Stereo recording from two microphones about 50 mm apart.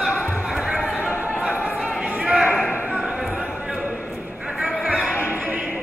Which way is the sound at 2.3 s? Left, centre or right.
Centre.